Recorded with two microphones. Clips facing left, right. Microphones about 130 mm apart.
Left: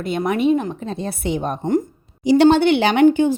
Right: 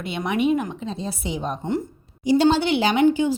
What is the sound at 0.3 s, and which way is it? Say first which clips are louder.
Speech: left 3 dB; 35° left (ahead or behind).